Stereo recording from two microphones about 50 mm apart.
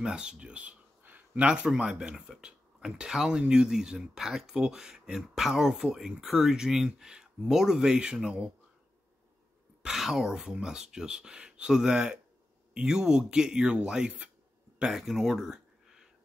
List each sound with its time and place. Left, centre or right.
0.0 s speech: centre
1.7 s speech: centre
9.8 s speech: centre
14.8 s a sound: centre